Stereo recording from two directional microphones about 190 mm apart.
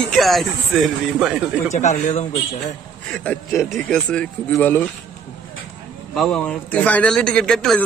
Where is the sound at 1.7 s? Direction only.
40° left (ahead or behind).